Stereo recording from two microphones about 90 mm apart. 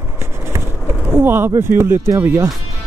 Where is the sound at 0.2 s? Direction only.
25° right (ahead or behind).